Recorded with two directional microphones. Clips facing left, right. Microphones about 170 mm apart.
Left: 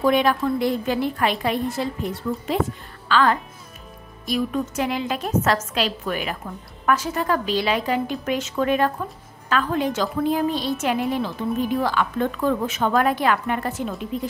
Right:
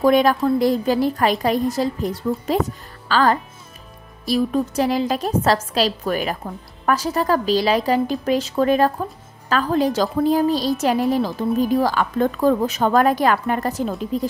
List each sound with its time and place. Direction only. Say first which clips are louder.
0.0 s a woman's voice: right 4 dB; 40° right (ahead or behind)